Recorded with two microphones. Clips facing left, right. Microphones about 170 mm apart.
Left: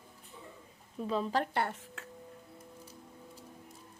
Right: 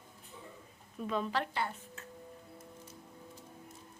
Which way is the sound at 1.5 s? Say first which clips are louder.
Left 3 dB; 75° left (ahead or behind).